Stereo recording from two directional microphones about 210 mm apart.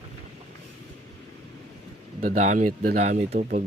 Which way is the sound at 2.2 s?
35° right (ahead or behind).